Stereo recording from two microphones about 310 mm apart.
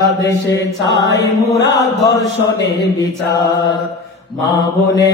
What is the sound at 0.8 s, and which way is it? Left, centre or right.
Chant, left.